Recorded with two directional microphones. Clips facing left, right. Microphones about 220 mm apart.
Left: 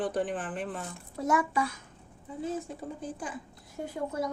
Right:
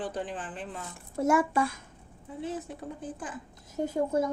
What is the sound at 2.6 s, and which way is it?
Speech, 5° right (ahead or behind).